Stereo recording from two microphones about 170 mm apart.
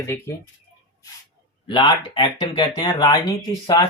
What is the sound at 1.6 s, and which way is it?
Speech, 30° left (ahead or behind).